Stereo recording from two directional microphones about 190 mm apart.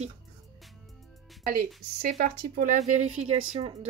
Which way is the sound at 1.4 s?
50° right (ahead or behind).